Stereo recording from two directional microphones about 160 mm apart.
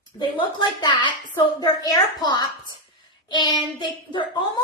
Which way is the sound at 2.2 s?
25° left (ahead or behind).